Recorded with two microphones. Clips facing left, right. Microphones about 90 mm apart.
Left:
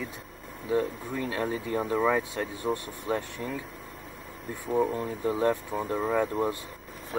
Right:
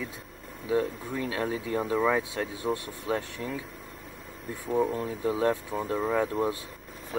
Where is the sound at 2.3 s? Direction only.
35° left (ahead or behind).